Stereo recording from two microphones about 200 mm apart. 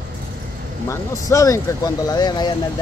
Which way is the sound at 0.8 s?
15° left (ahead or behind).